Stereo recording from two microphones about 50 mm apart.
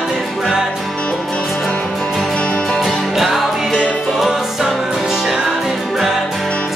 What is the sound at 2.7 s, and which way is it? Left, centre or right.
Music, centre.